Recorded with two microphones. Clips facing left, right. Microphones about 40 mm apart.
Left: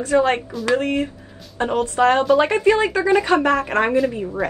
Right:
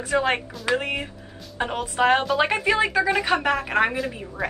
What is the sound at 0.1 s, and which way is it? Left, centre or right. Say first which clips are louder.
A woman's voice: left 5 dB; centre.